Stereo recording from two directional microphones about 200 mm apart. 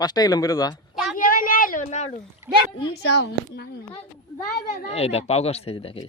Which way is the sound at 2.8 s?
60° left (ahead or behind).